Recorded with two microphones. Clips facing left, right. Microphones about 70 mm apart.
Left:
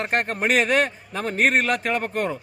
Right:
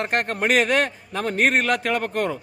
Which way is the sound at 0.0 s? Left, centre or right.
Left.